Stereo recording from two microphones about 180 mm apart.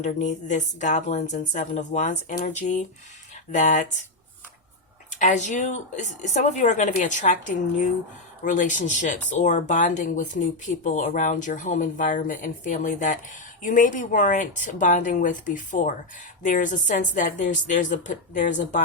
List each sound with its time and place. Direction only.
0.0 s a woman's voice: 40° left (ahead or behind)
5.2 s a woman's voice: 40° left (ahead or behind)